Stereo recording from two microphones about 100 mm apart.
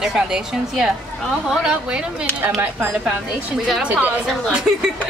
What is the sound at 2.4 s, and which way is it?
Speech, 20° right (ahead or behind).